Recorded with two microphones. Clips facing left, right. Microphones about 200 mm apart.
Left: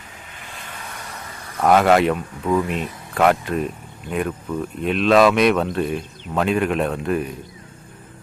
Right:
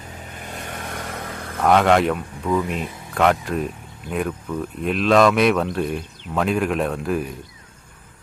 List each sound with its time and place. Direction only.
0.4 s vehicle: 45° right (ahead or behind); by 1.5 s 60° right (ahead or behind)
1.6 s speech: 5° left (ahead or behind)